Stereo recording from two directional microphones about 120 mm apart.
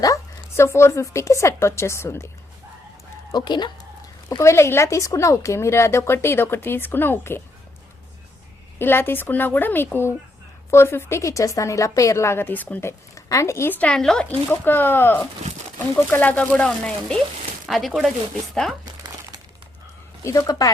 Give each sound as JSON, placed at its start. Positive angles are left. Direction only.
{"t": 0.0, "sound": "a woman's voice", "side_deg": 25}
{"t": 3.3, "sound": "speech", "side_deg": 35}
{"t": 4.3, "sound": "speech", "side_deg": 25}
{"t": 8.8, "sound": "speech", "side_deg": 20}
{"t": 14.5, "sound": "speech", "side_deg": 15}
{"t": 20.2, "sound": "speech", "side_deg": 30}